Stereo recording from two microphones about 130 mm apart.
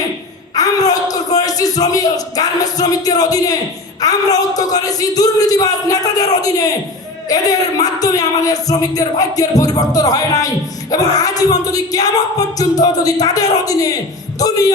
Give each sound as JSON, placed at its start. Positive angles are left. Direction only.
{"t": 0.5, "sound": "speech", "side_deg": 30}